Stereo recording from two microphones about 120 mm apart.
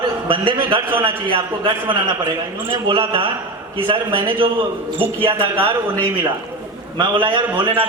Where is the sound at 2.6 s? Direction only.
45° right (ahead or behind).